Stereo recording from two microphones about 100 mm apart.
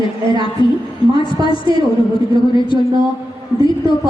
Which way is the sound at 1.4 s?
40° right (ahead or behind).